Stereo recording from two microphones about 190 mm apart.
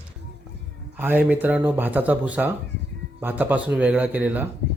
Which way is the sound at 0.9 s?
10° right (ahead or behind).